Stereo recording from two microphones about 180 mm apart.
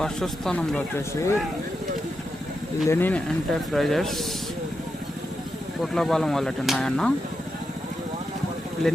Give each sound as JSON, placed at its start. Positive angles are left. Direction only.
{"t": 0.0, "sound": "speech", "side_deg": 5}
{"t": 2.8, "sound": "speech", "side_deg": 10}
{"t": 5.8, "sound": "speech", "side_deg": 0}